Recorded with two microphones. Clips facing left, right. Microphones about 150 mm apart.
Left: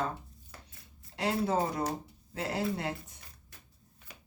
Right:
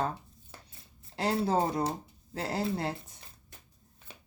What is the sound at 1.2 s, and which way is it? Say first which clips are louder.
Speech: right 2 dB; 35° right (ahead or behind).